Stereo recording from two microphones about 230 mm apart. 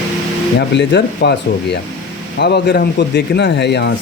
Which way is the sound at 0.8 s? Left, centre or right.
Left.